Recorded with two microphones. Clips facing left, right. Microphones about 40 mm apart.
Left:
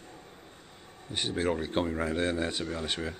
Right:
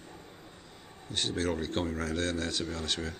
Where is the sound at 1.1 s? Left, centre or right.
Centre.